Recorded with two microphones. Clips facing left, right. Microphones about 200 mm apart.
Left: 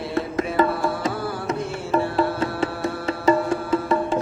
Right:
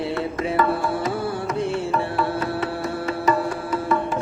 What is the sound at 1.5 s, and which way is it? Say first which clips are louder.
Music: left 1 dB; 25° left (ahead or behind).